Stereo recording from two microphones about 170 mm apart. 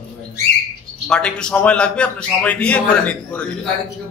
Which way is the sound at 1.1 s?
5° left (ahead or behind).